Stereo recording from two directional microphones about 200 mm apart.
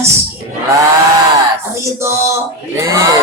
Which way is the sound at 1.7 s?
15° right (ahead or behind).